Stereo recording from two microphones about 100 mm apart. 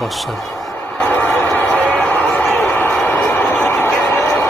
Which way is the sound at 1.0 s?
15° left (ahead or behind).